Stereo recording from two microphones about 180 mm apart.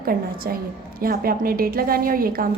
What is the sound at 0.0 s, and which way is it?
A woman's voice, 55° right (ahead or behind).